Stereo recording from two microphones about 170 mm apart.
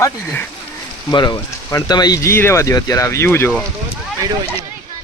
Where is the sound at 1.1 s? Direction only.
25° left (ahead or behind).